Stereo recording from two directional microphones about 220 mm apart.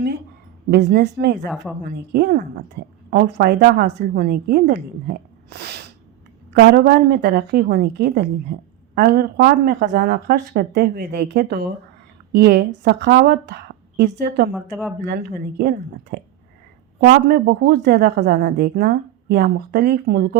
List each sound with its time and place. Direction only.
0.7 s a woman's voice: 50° right (ahead or behind)
14.5 s speech: 5° right (ahead or behind)
15.5 s a woman's voice: 45° right (ahead or behind)